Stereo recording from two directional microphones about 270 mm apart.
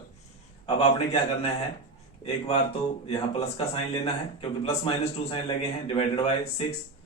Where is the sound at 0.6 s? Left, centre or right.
Left.